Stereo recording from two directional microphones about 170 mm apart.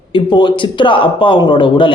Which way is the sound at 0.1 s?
25° left (ahead or behind).